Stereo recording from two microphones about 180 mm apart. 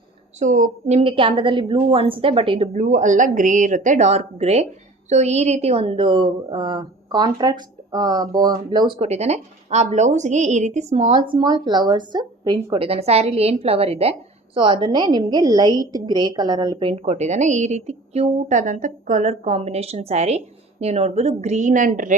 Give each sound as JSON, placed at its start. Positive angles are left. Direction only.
{"t": 0.3, "sound": "a woman's voice", "side_deg": -45}
{"t": 2.7, "sound": "a woman's voice", "side_deg": -45}
{"t": 9.0, "sound": "a woman's voice", "side_deg": -35}